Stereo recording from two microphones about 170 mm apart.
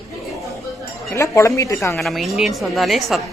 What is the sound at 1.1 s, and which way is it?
Speech, 15° left (ahead or behind).